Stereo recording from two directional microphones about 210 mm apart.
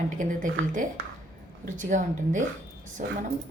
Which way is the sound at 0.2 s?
40° right (ahead or behind).